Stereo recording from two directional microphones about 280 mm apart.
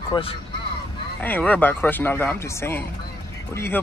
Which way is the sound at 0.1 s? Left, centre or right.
Centre.